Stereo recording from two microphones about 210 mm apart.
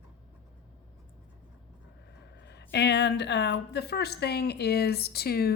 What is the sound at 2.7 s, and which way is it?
Speech, 55° left (ahead or behind).